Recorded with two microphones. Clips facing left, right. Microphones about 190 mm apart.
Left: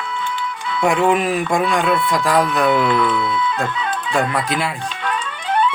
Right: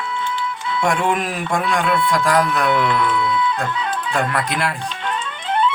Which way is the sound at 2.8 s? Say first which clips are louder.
Left 1 dB; 25° left (ahead or behind).